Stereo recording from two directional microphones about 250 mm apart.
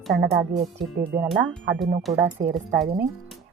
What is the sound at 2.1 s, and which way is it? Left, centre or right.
Speech, right.